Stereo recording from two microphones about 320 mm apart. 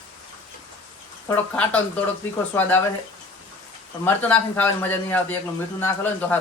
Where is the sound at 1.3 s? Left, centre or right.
Centre.